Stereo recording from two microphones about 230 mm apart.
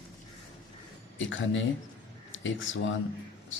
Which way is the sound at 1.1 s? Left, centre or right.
Left.